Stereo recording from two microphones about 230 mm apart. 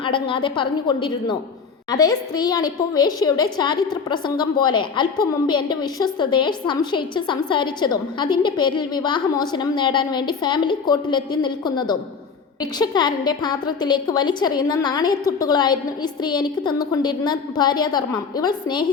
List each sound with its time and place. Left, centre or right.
0.0 s a woman's voice: left